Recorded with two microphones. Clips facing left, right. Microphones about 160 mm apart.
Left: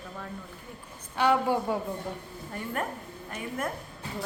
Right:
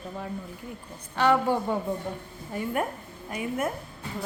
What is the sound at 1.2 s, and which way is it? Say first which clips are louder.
Speech: right 2 dB; 10° left (ahead or behind).